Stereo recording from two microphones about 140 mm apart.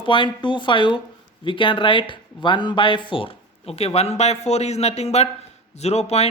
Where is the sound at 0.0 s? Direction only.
35° left (ahead or behind).